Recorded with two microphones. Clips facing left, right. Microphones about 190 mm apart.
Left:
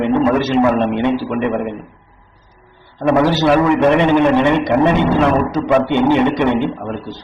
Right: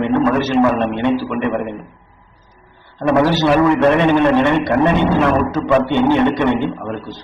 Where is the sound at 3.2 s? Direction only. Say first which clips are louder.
Right 1 dB; 15° left (ahead or behind).